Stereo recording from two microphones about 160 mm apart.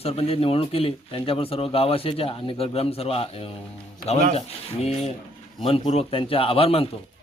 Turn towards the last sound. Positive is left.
turn(degrees=35)  # may be behind; listen again after turning